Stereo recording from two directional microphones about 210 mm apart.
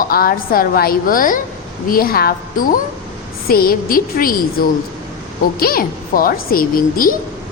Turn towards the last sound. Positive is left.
turn(degrees=40)  # may be behind; listen again after turning